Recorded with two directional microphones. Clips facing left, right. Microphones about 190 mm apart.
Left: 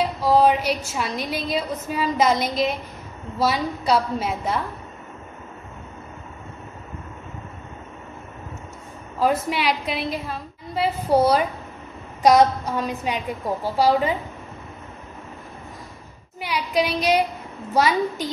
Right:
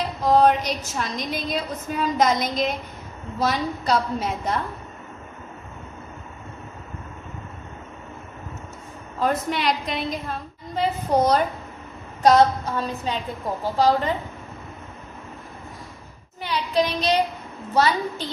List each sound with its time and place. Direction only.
0.2 s a woman's voice: 5° left (ahead or behind)
9.2 s a woman's voice: 5° left (ahead or behind)
16.3 s a woman's voice: 10° left (ahead or behind)